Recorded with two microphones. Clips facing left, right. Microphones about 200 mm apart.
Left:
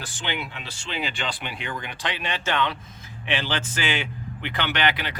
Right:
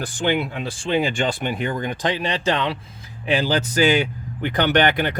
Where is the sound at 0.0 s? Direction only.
50° right (ahead or behind).